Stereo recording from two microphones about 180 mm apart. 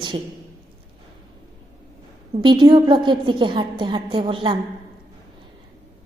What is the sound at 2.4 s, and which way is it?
A woman's voice, 25° right (ahead or behind).